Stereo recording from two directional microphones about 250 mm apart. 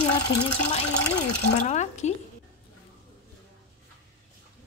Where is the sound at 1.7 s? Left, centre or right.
Left.